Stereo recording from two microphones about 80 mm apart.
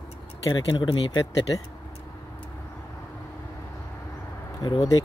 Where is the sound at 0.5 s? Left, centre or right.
Left.